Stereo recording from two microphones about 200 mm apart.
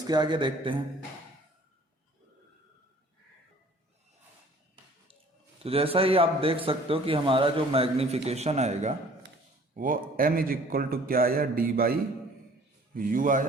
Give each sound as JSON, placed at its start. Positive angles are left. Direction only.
{"t": 0.1, "sound": "a man's voice", "side_deg": -20}
{"t": 5.6, "sound": "a man's voice", "side_deg": -30}